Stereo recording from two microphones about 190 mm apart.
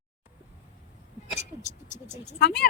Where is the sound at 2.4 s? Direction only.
60° left (ahead or behind).